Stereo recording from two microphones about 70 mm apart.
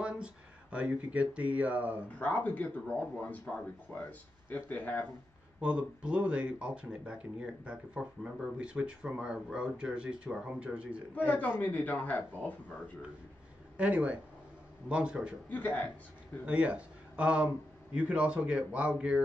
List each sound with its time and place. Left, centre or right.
0.0 s speech: centre
2.1 s speech: left
5.6 s speech: centre
11.1 s speech: left
13.7 s speech: centre
15.5 s speech: left
16.4 s speech: centre